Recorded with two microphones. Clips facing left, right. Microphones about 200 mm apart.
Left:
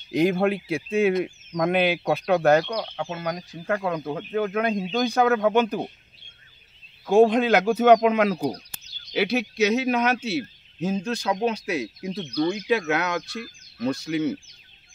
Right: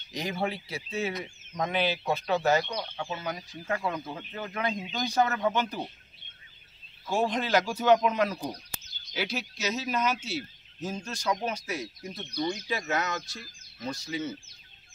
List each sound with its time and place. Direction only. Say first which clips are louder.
0.1 s speech: left 11 dB; 55° left (ahead or behind)
1.5 s speech: left 6 dB; 70° left (ahead or behind)
7.1 s speech: left 10 dB; 55° left (ahead or behind); by 8.6 s 75° left (ahead or behind)
9.1 s speech: left 10 dB; 60° left (ahead or behind)